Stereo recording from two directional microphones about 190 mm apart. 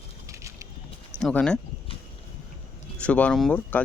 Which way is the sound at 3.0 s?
5° left (ahead or behind).